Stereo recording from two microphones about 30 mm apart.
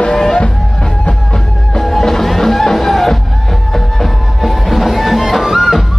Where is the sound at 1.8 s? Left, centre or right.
Centre.